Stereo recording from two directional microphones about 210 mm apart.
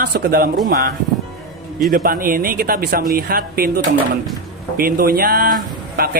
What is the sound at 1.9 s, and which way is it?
Speech, 45° right (ahead or behind).